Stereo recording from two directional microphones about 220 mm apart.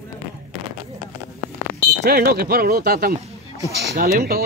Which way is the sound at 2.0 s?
45° right (ahead or behind).